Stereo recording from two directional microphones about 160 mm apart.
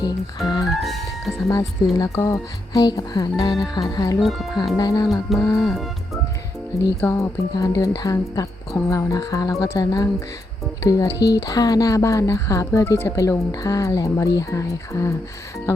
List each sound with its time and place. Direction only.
0.0 s speech: 25° left (ahead or behind)
0.8 s speech: centre (ahead or behind)
1.5 s speech: 20° left (ahead or behind)
4.2 s speech: centre (ahead or behind)
4.8 s speech: 25° left (ahead or behind)
5.5 s speech: centre (ahead or behind)
7.0 s speech: 20° left (ahead or behind)